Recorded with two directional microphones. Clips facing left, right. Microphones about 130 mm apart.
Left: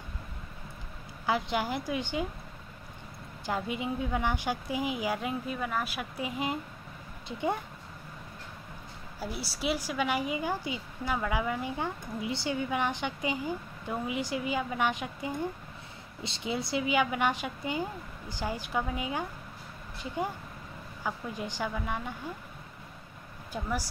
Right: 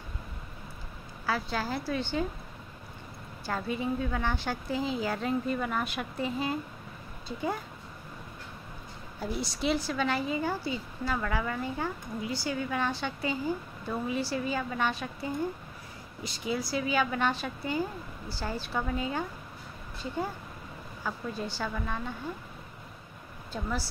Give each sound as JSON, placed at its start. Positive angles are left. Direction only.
{"t": 1.2, "sound": "a woman's voice", "side_deg": 20}
{"t": 3.4, "sound": "a woman's voice", "side_deg": 15}
{"t": 9.2, "sound": "a woman's voice", "side_deg": 5}
{"t": 21.0, "sound": "a woman's voice", "side_deg": 15}
{"t": 23.5, "sound": "a woman's voice", "side_deg": 15}